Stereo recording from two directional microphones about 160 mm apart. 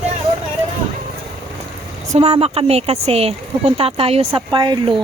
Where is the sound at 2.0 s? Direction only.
40° right (ahead or behind).